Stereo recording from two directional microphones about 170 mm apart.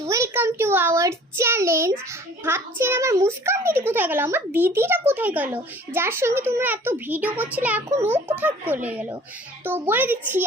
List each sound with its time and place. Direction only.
0.0 s a child's voice: 15° right (ahead or behind)